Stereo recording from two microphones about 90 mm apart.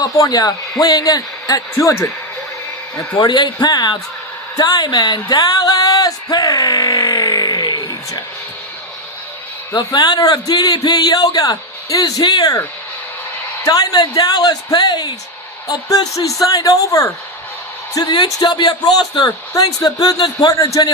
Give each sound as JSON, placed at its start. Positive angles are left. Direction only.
{"t": 0.0, "sound": "a man's voice", "side_deg": 40}
{"t": 3.2, "sound": "a man's voice", "side_deg": 55}
{"t": 4.5, "sound": "a sound", "side_deg": 40}
{"t": 9.7, "sound": "a man's voice", "side_deg": 55}
{"t": 13.7, "sound": "a man's voice", "side_deg": 45}
{"t": 17.9, "sound": "a man's voice", "side_deg": 50}